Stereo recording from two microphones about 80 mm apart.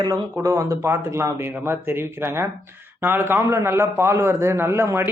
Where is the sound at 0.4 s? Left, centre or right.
Right.